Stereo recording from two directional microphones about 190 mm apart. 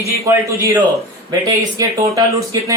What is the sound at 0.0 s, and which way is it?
Speech, 15° right (ahead or behind).